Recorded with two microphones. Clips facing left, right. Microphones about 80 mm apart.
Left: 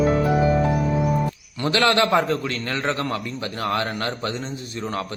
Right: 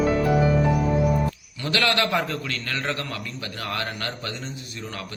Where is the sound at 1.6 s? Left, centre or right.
Left.